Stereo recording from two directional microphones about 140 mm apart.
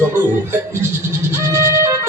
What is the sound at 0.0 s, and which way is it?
Music, 15° right (ahead or behind).